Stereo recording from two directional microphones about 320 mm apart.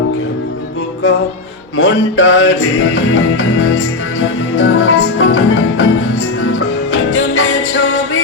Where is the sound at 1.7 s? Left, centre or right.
Left.